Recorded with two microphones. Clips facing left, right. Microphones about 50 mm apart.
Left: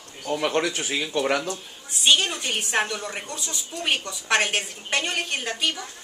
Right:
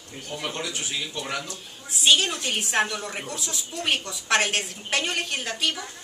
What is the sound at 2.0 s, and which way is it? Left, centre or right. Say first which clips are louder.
A woman's voice: even; centre.